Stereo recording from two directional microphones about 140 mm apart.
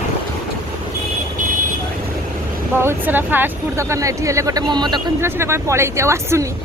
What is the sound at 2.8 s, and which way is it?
Speech, 15° right (ahead or behind).